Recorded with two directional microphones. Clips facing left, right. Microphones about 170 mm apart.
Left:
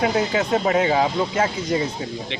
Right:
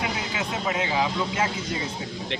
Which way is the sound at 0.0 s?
45° left (ahead or behind).